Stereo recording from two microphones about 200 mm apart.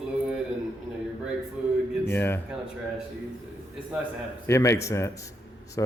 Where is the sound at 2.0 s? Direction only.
10° left (ahead or behind).